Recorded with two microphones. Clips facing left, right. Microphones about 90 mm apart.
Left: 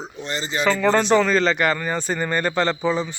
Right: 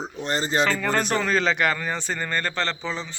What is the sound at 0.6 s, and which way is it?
Speech, centre (ahead or behind).